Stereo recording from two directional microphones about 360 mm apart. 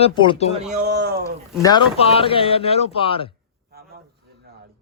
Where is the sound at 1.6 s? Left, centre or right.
Centre.